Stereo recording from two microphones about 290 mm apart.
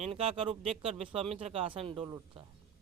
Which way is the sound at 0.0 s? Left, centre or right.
Centre.